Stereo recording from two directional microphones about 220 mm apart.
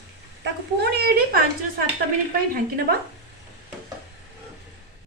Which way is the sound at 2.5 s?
40° right (ahead or behind).